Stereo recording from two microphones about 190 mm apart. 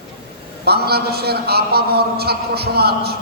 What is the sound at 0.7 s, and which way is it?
A man's voice, 55° right (ahead or behind).